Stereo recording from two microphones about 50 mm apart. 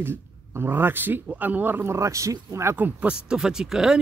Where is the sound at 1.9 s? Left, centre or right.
Right.